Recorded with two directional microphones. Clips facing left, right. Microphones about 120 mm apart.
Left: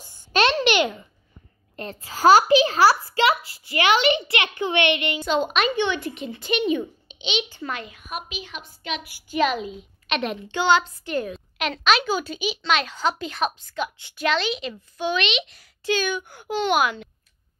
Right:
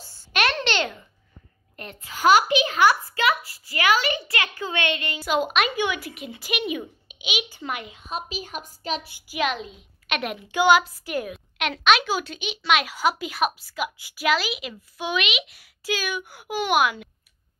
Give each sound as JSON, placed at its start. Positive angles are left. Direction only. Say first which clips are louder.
{"t": 0.3, "sound": "a sound", "louder": "left 4 dB", "side_deg": 25}
{"t": 0.6, "sound": "babbling", "louder": "left 5 dB", "side_deg": 15}
{"t": 1.8, "sound": "a child's voice", "louder": "left 3 dB", "side_deg": 35}
{"t": 5.2, "sound": "a woman's voice", "louder": "right 1 dB", "side_deg": -5}
{"t": 8.4, "sound": "a woman's voice", "louder": "right 3 dB", "side_deg": -40}
{"t": 9.3, "sound": "a child's voice", "louder": "left 4 dB", "side_deg": 0}